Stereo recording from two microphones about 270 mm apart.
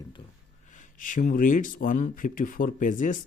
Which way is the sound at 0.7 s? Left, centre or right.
Left.